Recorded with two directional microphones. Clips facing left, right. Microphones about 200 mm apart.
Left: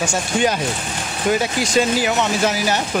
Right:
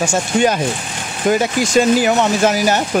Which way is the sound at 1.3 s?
45° right (ahead or behind).